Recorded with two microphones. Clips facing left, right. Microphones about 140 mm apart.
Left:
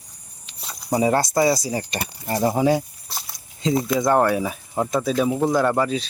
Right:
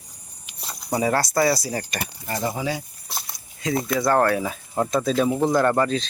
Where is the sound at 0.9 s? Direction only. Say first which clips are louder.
Left 2 dB; 20° left (ahead or behind).